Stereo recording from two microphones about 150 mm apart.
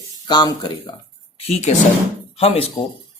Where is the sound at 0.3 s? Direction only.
30° left (ahead or behind).